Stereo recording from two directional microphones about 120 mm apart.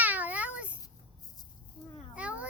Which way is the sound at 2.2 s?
10° right (ahead or behind).